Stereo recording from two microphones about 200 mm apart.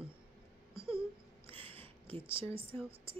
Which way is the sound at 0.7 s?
25° right (ahead or behind).